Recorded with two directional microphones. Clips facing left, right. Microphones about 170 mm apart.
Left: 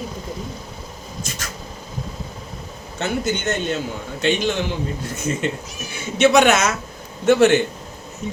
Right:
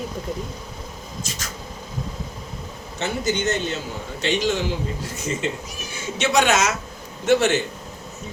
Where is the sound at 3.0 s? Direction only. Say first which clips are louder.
Left 1 dB; 55° left (ahead or behind).